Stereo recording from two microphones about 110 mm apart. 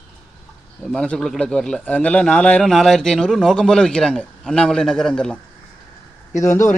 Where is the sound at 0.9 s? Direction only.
5° left (ahead or behind).